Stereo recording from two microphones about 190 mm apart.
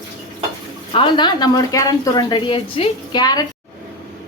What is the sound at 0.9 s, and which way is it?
A woman's voice, 25° left (ahead or behind).